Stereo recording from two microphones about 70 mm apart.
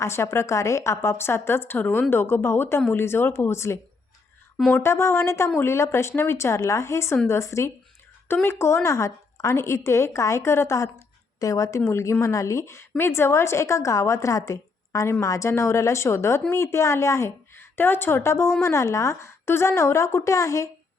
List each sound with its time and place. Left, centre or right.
0.0 s a woman's voice: left
4.8 s a woman's voice: left
8.3 s a woman's voice: left
11.3 s a woman's voice: left